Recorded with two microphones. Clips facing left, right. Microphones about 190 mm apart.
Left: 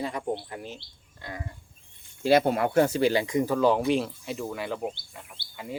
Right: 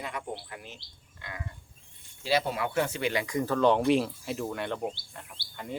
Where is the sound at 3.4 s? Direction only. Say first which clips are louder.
Right 2 dB; 10° left (ahead or behind).